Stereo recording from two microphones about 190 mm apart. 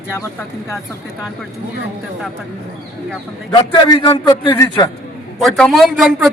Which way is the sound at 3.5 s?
25° left (ahead or behind).